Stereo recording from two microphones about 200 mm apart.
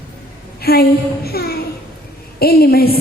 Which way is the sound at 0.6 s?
50° left (ahead or behind).